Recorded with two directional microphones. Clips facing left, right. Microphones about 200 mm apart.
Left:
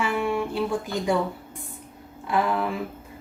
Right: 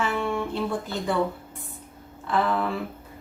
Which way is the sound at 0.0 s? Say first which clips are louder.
Left 1 dB; 10° left (ahead or behind).